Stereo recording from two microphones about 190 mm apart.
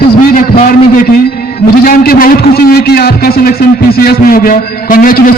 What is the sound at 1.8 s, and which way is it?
A man's voice, 50° left (ahead or behind).